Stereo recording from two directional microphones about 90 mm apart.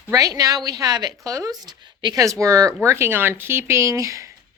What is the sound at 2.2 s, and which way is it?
Speech, 35° right (ahead or behind).